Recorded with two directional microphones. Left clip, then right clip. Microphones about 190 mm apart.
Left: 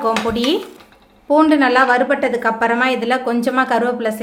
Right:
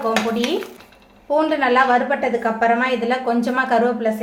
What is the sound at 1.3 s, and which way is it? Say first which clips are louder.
A woman's voice: left 4 dB; 40° left (ahead or behind).